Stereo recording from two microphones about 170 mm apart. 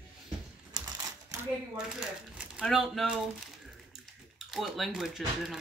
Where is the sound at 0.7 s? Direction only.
20° right (ahead or behind).